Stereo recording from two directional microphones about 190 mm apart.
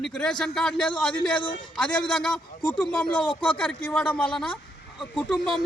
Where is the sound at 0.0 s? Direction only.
5° left (ahead or behind).